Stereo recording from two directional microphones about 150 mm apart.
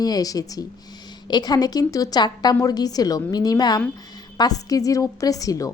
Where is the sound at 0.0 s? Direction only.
25° left (ahead or behind).